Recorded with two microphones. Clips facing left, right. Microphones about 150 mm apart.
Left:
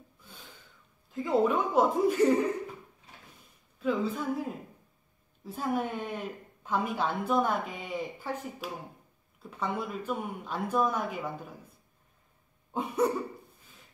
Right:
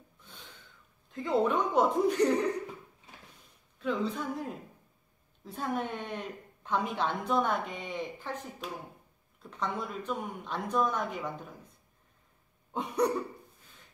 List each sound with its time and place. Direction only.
0.2 s a sound: 5° left (ahead or behind)
1.1 s a woman's voice: centre (ahead or behind)
3.8 s a woman's voice: 5° left (ahead or behind)
12.7 s a woman's voice: centre (ahead or behind)